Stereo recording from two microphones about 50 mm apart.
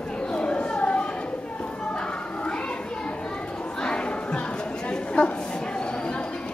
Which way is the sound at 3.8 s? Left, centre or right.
Centre.